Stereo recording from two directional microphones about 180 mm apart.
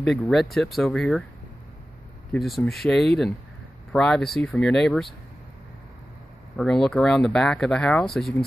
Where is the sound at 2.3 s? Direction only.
Centre (ahead or behind).